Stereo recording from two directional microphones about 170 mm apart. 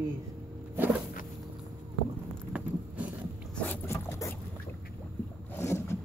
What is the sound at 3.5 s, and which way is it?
Boat, 10° left (ahead or behind).